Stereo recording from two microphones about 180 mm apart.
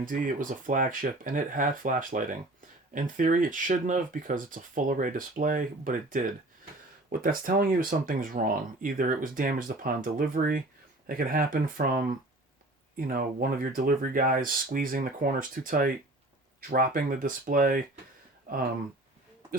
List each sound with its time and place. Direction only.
0.0 s speech: 50° right (ahead or behind)
13.0 s speech: 50° right (ahead or behind)